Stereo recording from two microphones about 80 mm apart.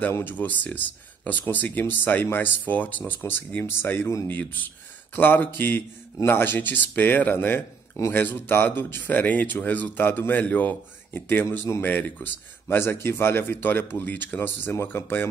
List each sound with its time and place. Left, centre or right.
0.1 s speech: left